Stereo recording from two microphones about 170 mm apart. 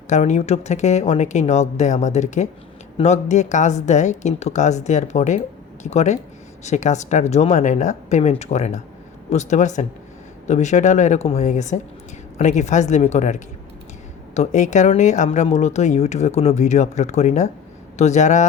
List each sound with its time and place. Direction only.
0.1 s speech: 40° left (ahead or behind)
14.3 s speech: 45° left (ahead or behind)